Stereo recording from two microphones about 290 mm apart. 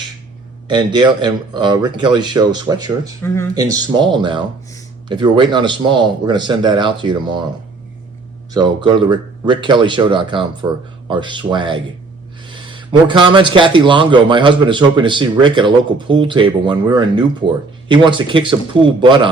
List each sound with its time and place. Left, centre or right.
0.7 s a man's voice: centre
3.2 s speech: centre
3.5 s a man's voice: centre
8.5 s a man's voice: centre